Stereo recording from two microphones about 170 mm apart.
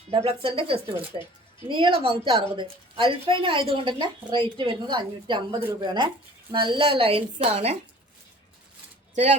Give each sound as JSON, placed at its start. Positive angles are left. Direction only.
{"t": 0.1, "sound": "a woman's voice", "side_deg": -35}